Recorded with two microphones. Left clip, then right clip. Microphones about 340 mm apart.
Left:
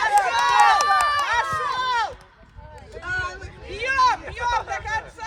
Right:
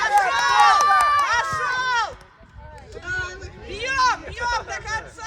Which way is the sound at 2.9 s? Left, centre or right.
Centre.